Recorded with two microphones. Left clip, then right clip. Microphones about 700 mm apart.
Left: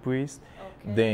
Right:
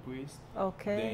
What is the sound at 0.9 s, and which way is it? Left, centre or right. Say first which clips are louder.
Speech: left 11 dB; right.